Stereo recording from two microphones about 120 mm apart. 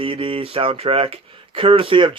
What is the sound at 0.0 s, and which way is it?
A man's voice, 50° right (ahead or behind).